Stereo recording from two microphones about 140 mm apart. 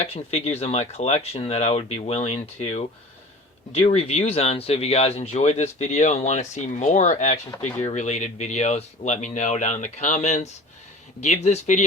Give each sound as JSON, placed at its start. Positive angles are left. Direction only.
{"t": 0.0, "sound": "speech", "side_deg": 45}